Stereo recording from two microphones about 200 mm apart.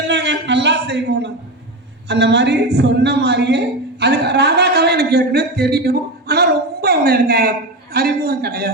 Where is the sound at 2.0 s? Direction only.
60° right (ahead or behind).